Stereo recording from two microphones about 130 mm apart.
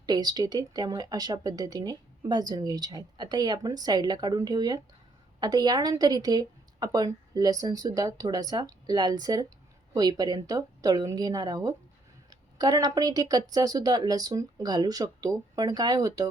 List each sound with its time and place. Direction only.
0.0 s a woman's voice: 30° right (ahead or behind)